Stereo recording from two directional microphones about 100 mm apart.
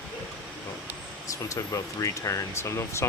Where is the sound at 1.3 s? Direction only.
35° left (ahead or behind).